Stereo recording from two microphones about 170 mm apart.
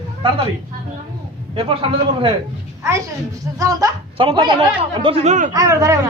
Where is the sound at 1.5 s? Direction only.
30° right (ahead or behind).